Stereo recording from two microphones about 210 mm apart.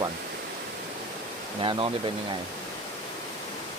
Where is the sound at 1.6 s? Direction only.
25° right (ahead or behind).